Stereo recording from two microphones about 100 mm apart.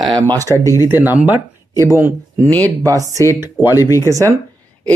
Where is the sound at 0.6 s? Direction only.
35° left (ahead or behind).